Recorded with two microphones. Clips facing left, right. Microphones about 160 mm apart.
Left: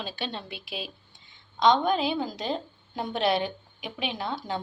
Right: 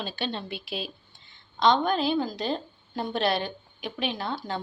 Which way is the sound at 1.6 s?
15° left (ahead or behind).